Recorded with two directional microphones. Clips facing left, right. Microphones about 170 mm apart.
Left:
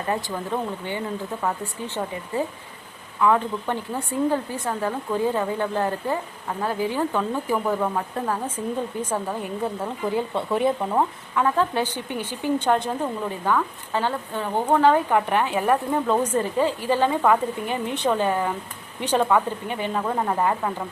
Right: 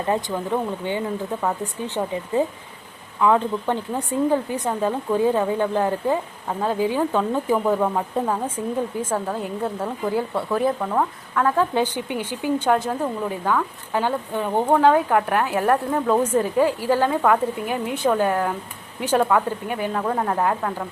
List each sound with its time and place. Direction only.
0.1 s a woman's voice: 20° right (ahead or behind)
9.0 s speech: 10° left (ahead or behind)
10.8 s speech: 15° left (ahead or behind)
11.5 s a woman's voice: 15° right (ahead or behind); by 16.1 s 5° left (ahead or behind)
16.1 s a woman's voice: 10° right (ahead or behind)
17.1 s a woman's voice: centre (ahead or behind)